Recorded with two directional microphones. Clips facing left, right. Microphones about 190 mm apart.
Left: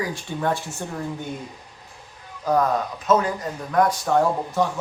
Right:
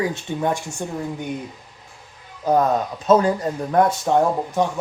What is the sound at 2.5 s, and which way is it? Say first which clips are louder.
Speech: right 3 dB; 25° right (ahead or behind).